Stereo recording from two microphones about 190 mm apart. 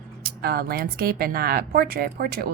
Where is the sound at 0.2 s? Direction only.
55° right (ahead or behind).